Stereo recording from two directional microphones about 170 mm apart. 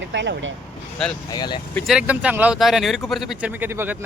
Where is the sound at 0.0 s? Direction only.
90° right.